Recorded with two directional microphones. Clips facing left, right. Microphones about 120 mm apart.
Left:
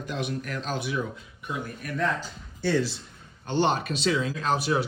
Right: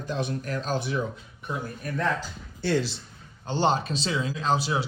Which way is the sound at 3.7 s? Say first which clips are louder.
Even; 30° right (ahead or behind).